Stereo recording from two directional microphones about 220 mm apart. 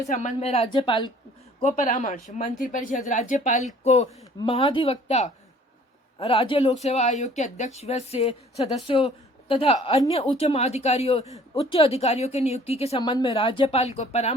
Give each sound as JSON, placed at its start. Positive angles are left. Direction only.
{"t": 0.1, "sound": "speech", "side_deg": 30}
{"t": 1.6, "sound": "speech", "side_deg": 35}